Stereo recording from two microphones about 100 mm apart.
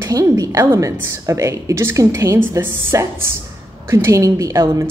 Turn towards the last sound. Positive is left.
turn(degrees=-30)  # may be behind; listen again after turning